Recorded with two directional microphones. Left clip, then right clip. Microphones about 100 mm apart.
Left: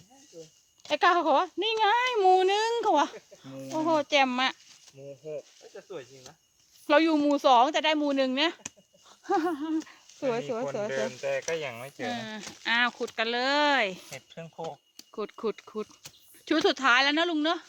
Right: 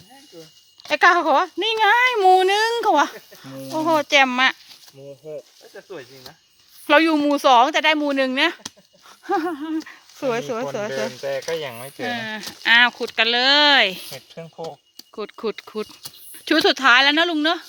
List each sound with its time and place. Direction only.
0.9 s speech: 15° left (ahead or behind)
5.0 s speech: 25° right (ahead or behind)
5.7 s speech: 85° left
6.8 s speech: 5° left (ahead or behind)
11.3 s speech: 10° right (ahead or behind)
11.5 s speech: 25° right (ahead or behind)
12.0 s speech: 10° left (ahead or behind)
14.3 s speech: 25° right (ahead or behind)
15.1 s speech: 5° left (ahead or behind)